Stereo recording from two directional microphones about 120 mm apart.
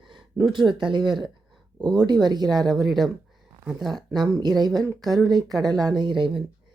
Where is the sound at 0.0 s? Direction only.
40° right (ahead or behind).